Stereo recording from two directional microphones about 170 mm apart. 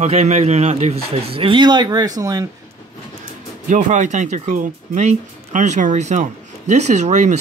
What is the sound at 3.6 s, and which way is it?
Speech, 50° right (ahead or behind).